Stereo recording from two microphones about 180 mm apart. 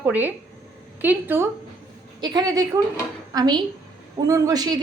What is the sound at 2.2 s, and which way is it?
A woman's voice, 20° right (ahead or behind).